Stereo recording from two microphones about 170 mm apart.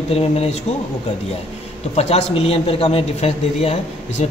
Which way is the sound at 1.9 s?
40° left (ahead or behind).